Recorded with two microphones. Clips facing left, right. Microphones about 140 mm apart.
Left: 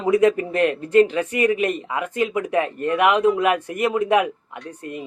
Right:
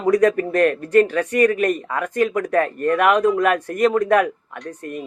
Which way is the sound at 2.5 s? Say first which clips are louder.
Right 3 dB; 15° left (ahead or behind).